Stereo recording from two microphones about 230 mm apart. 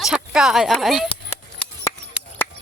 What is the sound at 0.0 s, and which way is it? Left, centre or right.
Speech, centre.